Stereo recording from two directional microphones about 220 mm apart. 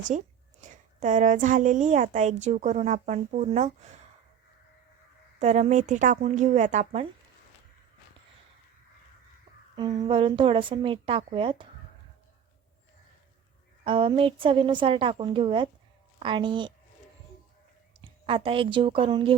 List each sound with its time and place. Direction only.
0.1 s a woman's voice: 30° right (ahead or behind)
5.4 s a woman's voice: 30° right (ahead or behind)
9.7 s a woman's voice: 20° right (ahead or behind)
13.8 s a woman's voice: 25° right (ahead or behind)
18.0 s a woman's voice: 25° right (ahead or behind)